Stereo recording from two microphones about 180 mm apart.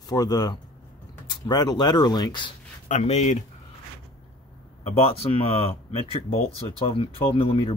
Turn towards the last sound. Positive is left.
turn(degrees=30)  # may be behind; listen again after turning